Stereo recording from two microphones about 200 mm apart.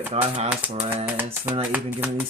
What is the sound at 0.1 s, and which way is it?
Speech, 35° right (ahead or behind).